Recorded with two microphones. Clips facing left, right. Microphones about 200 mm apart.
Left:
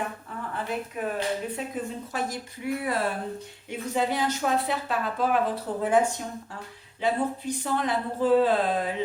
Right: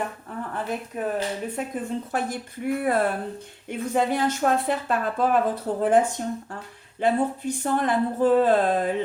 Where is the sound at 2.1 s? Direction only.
55° right (ahead or behind).